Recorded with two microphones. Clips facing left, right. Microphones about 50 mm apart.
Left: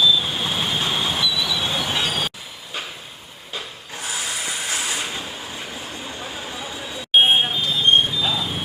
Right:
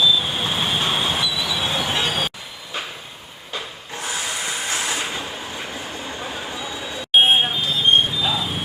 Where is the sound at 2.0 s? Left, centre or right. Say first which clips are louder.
Right 1 dB; centre.